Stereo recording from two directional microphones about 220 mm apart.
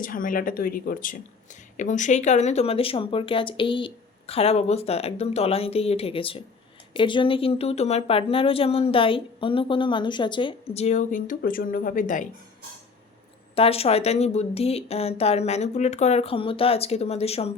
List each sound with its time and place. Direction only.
0.0 s speech: 40° left (ahead or behind)
13.6 s speech: 25° left (ahead or behind)